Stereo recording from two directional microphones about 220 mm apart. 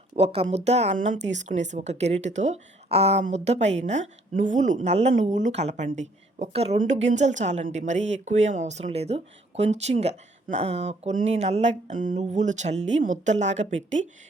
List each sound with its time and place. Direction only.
0.2 s speech: 25° right (ahead or behind)